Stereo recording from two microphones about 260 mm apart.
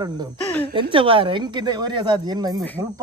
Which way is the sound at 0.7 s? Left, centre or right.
Centre.